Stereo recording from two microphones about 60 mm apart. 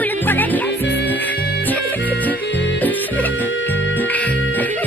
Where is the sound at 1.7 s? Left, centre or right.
Left.